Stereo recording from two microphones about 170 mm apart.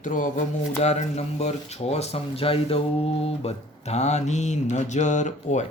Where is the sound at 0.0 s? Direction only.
50° left (ahead or behind).